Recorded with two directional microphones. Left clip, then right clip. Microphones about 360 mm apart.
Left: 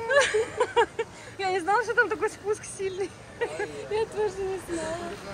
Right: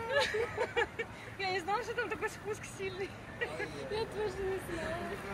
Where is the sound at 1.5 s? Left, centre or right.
Left.